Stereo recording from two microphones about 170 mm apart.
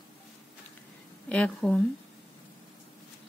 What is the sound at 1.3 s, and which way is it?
Speech, 5° left (ahead or behind).